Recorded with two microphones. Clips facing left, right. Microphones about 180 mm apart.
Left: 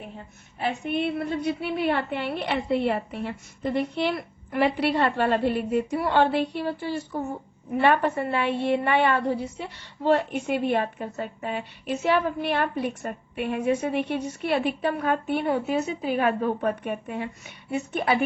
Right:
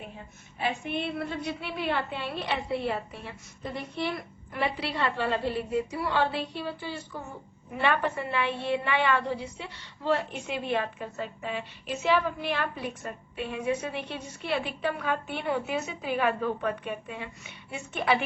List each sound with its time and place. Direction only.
1.3 s a woman's voice: 50° left (ahead or behind)